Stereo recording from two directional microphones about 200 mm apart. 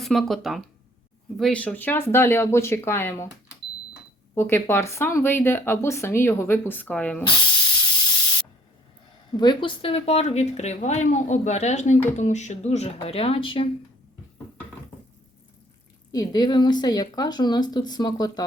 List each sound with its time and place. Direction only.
0.0 s speech: centre (ahead or behind)
4.4 s speech: 10° left (ahead or behind)
9.3 s speech: 20° left (ahead or behind)
16.1 s speech: 20° left (ahead or behind)